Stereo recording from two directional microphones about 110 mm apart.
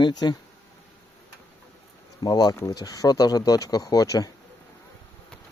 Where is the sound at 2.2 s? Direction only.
35° left (ahead or behind).